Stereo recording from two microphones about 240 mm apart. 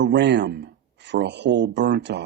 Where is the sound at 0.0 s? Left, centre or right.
Right.